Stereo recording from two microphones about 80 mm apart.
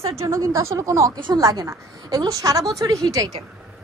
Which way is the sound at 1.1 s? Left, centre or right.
Right.